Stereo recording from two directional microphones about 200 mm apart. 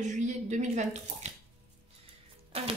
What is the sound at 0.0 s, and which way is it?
A woman's voice, 35° right (ahead or behind).